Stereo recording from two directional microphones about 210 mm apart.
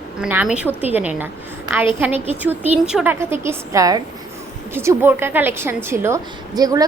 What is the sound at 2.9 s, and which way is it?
A woman's voice, 5° right (ahead or behind).